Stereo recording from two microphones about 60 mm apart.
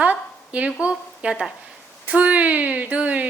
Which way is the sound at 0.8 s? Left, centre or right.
Centre.